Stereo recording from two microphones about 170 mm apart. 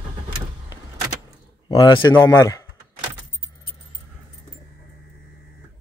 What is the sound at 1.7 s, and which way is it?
Speech, 25° left (ahead or behind).